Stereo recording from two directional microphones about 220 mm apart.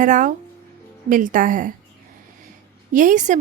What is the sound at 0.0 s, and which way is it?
A woman's voice, 35° right (ahead or behind).